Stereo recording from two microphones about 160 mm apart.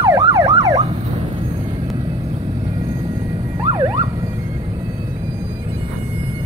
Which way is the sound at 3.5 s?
25° right (ahead or behind).